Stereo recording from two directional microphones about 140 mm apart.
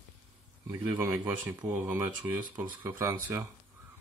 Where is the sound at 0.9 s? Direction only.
20° right (ahead or behind).